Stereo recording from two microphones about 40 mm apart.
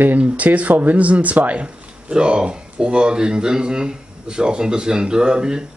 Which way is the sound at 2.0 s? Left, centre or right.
Right.